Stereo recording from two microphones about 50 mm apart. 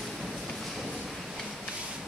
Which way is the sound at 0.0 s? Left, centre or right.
Centre.